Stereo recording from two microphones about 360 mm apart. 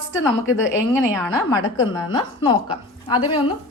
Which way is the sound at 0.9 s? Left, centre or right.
Centre.